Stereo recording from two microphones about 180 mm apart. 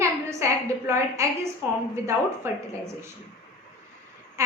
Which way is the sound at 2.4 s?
15° right (ahead or behind).